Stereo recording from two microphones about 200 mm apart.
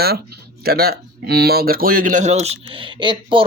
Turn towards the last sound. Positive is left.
turn(degrees=-25)  # may be behind; listen again after turning